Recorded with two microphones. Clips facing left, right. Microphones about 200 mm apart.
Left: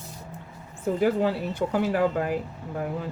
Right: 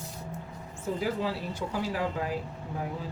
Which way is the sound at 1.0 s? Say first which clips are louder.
Left 8 dB; 60° left (ahead or behind).